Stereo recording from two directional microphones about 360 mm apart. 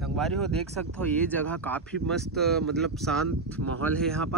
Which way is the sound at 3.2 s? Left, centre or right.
Right.